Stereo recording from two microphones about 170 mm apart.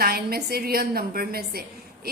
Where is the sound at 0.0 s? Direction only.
65° right (ahead or behind).